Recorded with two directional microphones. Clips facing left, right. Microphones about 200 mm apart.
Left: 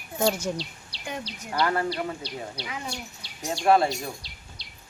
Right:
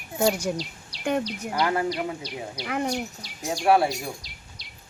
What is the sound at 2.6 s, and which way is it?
Bird, 60° right (ahead or behind).